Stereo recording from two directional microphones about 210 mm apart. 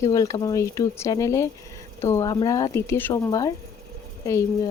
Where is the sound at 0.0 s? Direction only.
15° left (ahead or behind).